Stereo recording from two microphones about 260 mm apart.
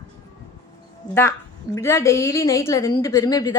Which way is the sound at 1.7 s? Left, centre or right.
Centre.